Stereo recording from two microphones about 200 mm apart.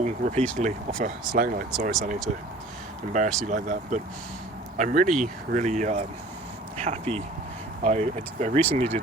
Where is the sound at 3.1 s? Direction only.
40° right (ahead or behind).